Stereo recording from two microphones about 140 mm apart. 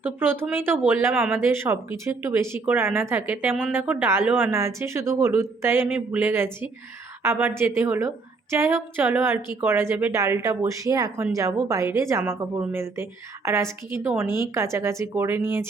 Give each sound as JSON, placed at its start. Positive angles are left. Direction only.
{"t": 0.0, "sound": "a woman's voice", "side_deg": -15}